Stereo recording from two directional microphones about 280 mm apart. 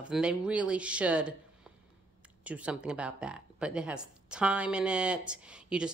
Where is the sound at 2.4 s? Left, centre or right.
Centre.